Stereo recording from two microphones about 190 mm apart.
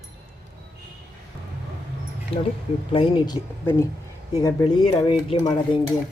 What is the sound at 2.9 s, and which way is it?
Dishes, 25° left (ahead or behind).